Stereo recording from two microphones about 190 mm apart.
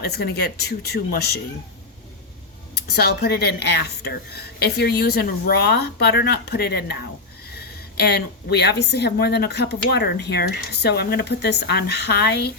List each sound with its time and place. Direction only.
0.1 s a woman's voice: 55° left (ahead or behind)
2.7 s a woman's voice: 55° left (ahead or behind)